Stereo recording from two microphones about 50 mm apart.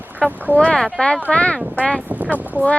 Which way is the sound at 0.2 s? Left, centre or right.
Centre.